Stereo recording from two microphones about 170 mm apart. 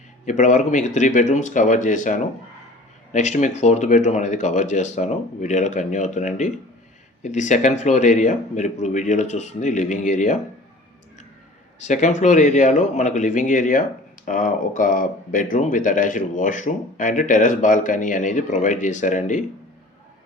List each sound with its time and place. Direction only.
0.3 s speech: 45° left (ahead or behind)
11.8 s speech: 45° left (ahead or behind)